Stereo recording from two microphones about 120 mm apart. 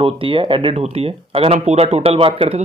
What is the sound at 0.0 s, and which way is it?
Speech, 45° right (ahead or behind).